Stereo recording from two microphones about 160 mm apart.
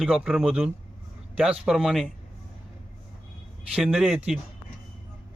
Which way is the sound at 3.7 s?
Centre (ahead or behind).